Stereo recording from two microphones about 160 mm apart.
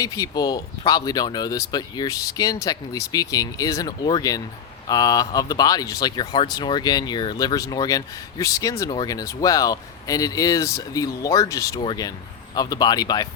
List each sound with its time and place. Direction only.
0.0 s speech: 25° left (ahead or behind)